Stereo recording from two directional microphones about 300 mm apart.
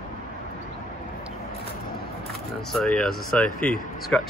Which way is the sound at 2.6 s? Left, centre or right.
Centre.